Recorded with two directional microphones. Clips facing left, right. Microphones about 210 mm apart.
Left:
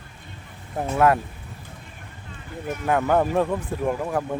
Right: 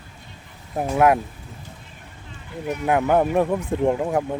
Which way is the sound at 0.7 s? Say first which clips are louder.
Right 2 dB; 15° right (ahead or behind).